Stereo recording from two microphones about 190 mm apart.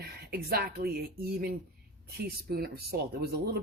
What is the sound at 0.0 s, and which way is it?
Speech, 55° right (ahead or behind).